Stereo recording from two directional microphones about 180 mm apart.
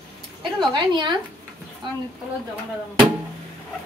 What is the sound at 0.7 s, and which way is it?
Speech, 25° right (ahead or behind).